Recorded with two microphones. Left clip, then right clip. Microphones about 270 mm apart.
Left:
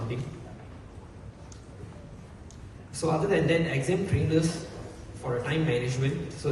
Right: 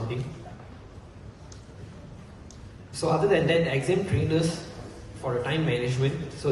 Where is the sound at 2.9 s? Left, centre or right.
Centre.